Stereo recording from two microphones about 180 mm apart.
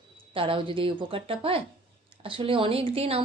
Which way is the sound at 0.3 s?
30° right (ahead or behind).